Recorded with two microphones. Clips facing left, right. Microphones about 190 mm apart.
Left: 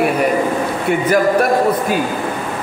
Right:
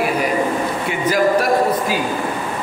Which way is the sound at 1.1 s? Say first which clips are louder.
Left 1 dB; 55° left (ahead or behind).